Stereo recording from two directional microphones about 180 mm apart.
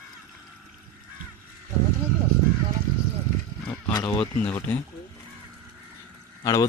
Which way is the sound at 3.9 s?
25° left (ahead or behind).